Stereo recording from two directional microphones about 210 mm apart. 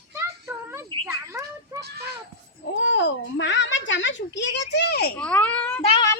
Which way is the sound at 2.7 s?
60° left (ahead or behind).